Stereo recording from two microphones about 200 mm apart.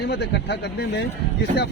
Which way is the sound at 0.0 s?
55° left (ahead or behind).